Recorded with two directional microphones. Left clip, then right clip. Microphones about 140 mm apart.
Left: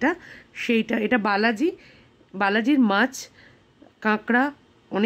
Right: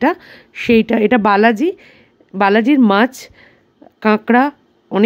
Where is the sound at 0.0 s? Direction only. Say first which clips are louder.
Right 8 dB; 45° right (ahead or behind).